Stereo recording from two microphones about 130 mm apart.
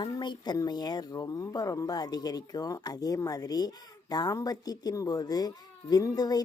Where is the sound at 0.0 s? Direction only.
35° left (ahead or behind).